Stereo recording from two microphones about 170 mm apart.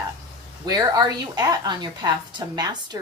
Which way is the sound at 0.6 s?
20° right (ahead or behind).